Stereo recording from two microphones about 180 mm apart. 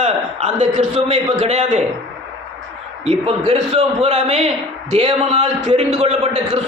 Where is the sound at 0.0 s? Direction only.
40° right (ahead or behind).